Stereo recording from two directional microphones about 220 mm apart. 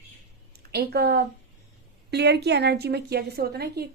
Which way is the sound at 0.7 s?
45° right (ahead or behind).